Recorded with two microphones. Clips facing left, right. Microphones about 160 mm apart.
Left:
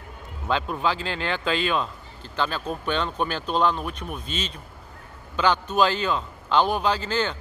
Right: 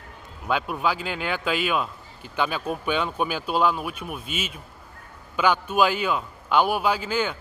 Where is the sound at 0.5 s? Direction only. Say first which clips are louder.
Even; 10° right (ahead or behind).